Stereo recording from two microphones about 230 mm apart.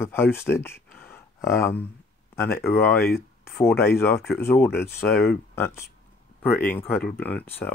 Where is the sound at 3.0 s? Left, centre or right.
Left.